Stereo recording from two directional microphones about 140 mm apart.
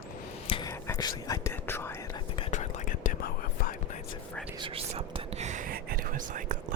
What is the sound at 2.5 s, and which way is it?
Whispering, 65° left (ahead or behind).